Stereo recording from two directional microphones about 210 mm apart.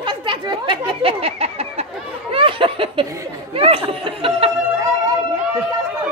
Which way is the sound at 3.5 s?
25° right (ahead or behind).